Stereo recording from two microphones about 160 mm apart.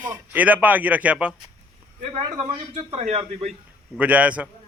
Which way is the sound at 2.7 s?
40° right (ahead or behind).